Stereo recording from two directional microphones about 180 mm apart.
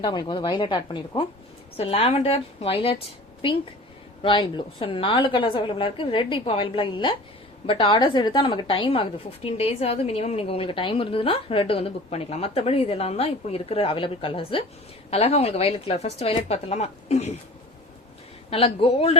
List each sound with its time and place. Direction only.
0.0 s a woman's voice: 25° left (ahead or behind)
18.5 s a woman's voice: 30° left (ahead or behind)